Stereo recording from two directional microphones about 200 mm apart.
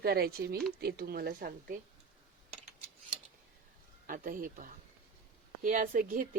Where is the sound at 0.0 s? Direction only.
50° right (ahead or behind).